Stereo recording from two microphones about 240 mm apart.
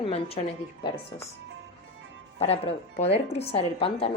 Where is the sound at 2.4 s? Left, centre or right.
Left.